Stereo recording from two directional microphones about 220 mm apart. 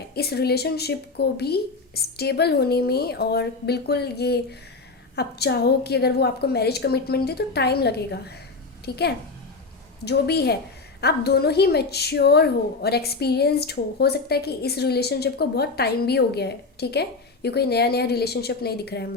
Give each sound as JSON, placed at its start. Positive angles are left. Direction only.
{"t": 0.1, "sound": "a woman's voice", "side_deg": 45}